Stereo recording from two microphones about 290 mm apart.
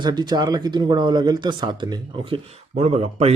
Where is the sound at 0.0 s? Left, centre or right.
Centre.